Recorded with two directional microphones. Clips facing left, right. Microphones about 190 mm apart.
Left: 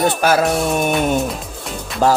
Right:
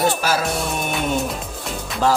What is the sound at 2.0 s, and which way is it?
Speech, 45° left (ahead or behind).